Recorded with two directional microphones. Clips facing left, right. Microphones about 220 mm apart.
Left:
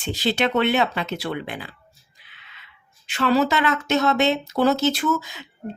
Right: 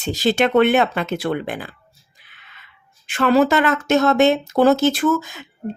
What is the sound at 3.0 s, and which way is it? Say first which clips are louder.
A woman's voice: right 4 dB; 50° right (ahead or behind).